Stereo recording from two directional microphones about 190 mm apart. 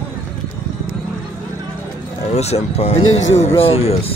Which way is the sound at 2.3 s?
35° left (ahead or behind).